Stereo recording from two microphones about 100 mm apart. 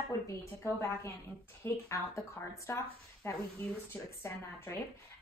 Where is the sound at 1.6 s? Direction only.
30° left (ahead or behind).